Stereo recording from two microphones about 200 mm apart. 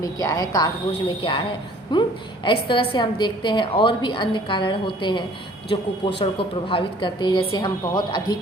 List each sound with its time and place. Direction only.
0.0 s a woman's voice: 20° left (ahead or behind)